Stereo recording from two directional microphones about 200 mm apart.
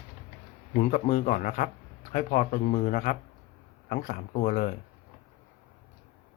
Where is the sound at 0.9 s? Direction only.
40° left (ahead or behind).